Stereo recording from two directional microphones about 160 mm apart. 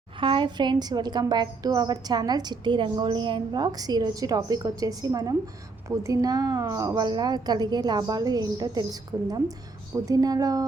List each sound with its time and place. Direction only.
0.2 s a woman's voice: 30° right (ahead or behind)